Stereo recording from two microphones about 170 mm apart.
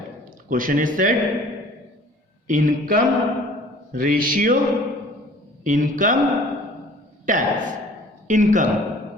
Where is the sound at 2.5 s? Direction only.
55° right (ahead or behind).